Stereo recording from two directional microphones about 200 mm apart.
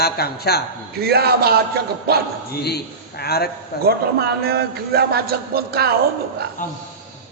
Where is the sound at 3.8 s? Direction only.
50° right (ahead or behind).